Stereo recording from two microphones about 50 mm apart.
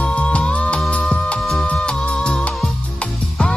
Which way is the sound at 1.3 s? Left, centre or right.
Centre.